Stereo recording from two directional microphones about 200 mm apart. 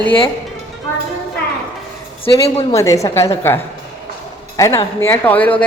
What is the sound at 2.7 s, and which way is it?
Speech, 15° left (ahead or behind).